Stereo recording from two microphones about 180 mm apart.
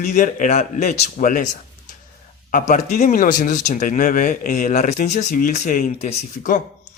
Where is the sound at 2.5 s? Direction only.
45° left (ahead or behind).